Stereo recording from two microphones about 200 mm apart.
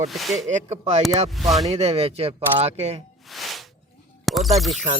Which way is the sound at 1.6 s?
30° right (ahead or behind).